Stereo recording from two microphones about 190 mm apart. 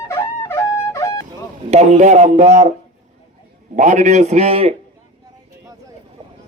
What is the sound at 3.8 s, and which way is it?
Speech, 40° right (ahead or behind).